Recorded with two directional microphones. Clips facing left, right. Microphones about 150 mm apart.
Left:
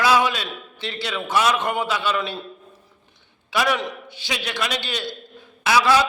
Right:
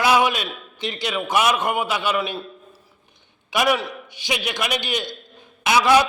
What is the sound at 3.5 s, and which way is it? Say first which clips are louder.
A man's voice: right 2 dB; 15° right (ahead or behind).